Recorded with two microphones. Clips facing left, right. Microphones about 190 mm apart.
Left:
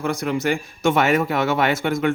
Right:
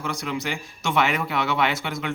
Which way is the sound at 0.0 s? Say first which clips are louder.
Left 7 dB; 50° left (ahead or behind).